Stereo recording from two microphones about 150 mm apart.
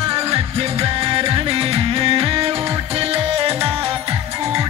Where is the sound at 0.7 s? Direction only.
40° right (ahead or behind).